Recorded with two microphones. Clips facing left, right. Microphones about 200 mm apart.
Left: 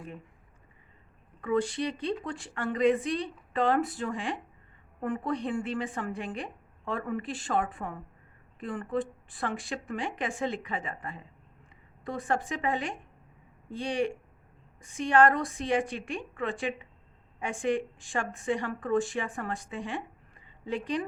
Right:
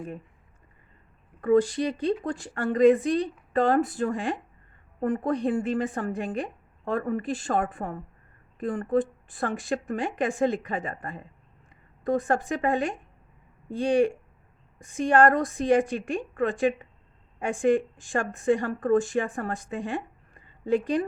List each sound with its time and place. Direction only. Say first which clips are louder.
1.4 s a woman's voice: right 7 dB; 40° right (ahead or behind)